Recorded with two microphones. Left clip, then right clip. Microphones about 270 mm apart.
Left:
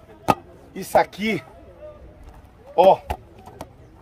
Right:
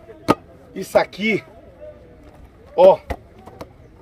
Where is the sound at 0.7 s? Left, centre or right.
Centre.